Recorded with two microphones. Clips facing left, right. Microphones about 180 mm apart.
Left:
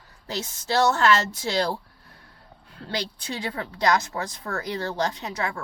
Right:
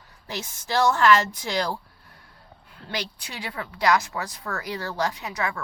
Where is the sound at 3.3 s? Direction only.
35° left (ahead or behind).